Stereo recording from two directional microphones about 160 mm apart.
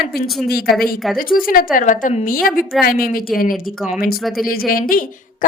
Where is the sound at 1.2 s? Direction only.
65° left (ahead or behind).